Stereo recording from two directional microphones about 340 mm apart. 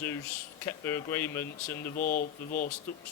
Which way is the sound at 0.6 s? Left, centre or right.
Centre.